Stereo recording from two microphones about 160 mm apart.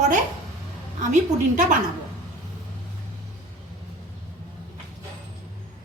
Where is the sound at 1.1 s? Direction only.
50° right (ahead or behind).